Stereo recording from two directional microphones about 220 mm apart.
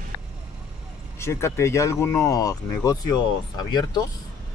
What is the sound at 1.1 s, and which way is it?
Speech, 10° left (ahead or behind).